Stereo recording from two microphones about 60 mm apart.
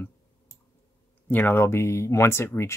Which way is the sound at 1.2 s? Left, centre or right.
Left.